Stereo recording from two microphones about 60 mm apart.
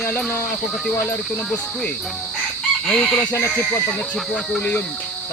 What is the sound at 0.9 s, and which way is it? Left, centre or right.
Speech, left.